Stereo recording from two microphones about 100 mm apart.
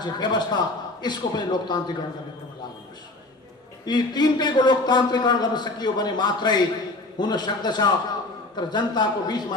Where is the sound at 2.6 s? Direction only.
45° left (ahead or behind).